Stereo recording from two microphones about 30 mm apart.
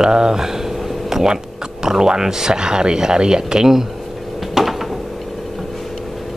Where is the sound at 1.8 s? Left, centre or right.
Right.